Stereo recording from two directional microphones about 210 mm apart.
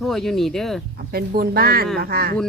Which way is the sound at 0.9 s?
45° right (ahead or behind).